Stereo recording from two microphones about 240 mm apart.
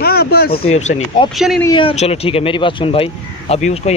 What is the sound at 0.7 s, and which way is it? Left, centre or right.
Speech, left.